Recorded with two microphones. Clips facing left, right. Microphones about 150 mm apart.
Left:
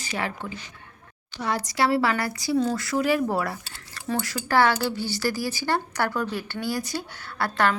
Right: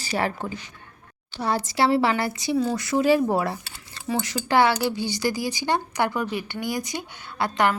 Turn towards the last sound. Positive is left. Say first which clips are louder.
# right 1 dB
turn(degrees=-15)  # may be behind; listen again after turning